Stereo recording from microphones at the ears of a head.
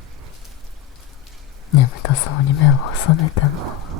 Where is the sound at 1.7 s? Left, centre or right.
Left.